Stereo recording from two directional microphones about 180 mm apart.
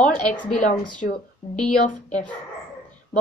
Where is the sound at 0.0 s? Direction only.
45° left (ahead or behind).